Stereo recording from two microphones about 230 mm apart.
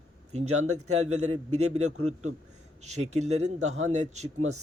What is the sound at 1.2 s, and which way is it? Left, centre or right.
Speech, right.